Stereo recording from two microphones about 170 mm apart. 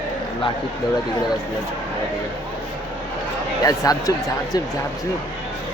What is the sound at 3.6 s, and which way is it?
Speech, 20° left (ahead or behind).